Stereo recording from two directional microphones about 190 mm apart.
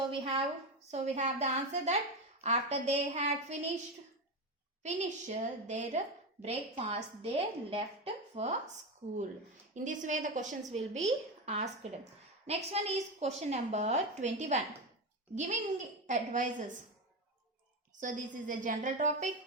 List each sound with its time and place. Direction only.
0.0 s a sound: 30° right (ahead or behind)
0.9 s a woman's voice: 35° right (ahead or behind)
4.8 s a woman's voice: 40° right (ahead or behind)
9.7 s a woman's voice: 40° right (ahead or behind)
18.0 s a woman's voice: 45° right (ahead or behind)